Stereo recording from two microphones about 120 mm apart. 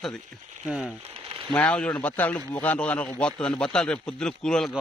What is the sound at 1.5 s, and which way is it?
A man's voice, 10° left (ahead or behind).